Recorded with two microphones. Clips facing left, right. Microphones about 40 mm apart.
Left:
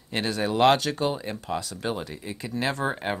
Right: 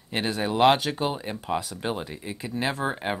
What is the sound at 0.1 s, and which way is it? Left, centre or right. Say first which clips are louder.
Speech: even; centre.